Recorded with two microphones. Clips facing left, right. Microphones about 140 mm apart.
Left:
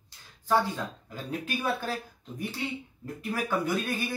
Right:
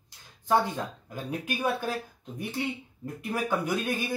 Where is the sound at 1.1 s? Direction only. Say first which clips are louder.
Even; 15° right (ahead or behind).